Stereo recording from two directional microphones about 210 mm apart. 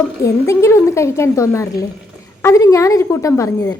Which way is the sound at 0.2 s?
15° left (ahead or behind).